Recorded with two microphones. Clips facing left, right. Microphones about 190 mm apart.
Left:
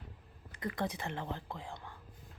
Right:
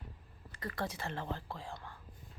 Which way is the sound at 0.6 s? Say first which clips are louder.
Left 2 dB; 20° left (ahead or behind).